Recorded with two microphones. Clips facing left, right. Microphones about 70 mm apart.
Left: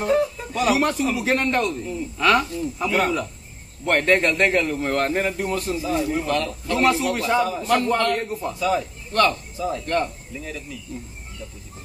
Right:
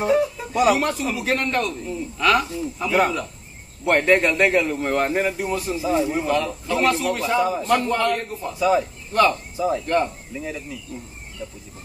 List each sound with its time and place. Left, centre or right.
0.0 s a man's voice: centre
5.8 s a man's voice: centre
8.5 s a man's voice: centre